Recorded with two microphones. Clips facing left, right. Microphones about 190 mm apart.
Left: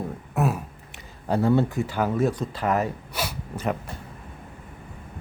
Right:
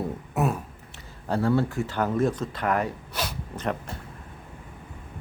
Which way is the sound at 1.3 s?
20° left (ahead or behind).